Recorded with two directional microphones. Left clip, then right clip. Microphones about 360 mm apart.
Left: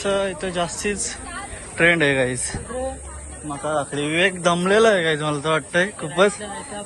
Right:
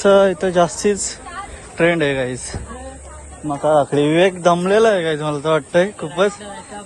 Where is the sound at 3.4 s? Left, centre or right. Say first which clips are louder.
Right 9 dB; right.